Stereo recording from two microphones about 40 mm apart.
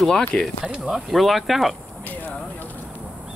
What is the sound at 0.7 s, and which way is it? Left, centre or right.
Speech, centre.